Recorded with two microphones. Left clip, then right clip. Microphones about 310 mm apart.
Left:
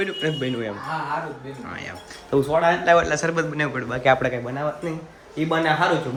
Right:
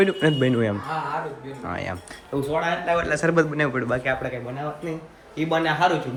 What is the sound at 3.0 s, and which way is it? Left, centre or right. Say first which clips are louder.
Speech: right 2 dB; centre.